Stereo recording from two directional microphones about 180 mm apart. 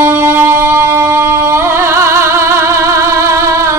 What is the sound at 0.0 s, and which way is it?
Music, 15° right (ahead or behind).